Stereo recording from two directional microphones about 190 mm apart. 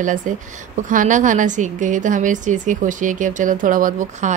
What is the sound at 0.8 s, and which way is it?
A woman's voice, 40° right (ahead or behind).